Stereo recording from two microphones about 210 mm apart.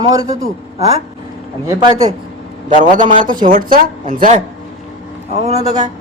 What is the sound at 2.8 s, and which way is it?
Speech, 40° right (ahead or behind).